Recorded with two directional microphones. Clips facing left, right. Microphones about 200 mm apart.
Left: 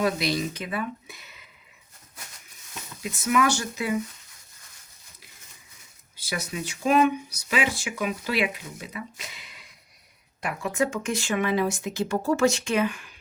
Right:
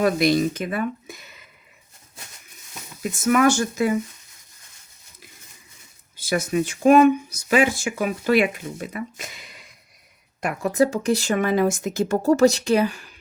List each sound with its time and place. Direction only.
0.0 s speech: 50° right (ahead or behind)
3.0 s speech: 50° right (ahead or behind)
6.1 s speech: 50° right (ahead or behind)